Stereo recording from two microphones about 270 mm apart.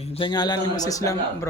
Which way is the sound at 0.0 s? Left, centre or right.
Centre.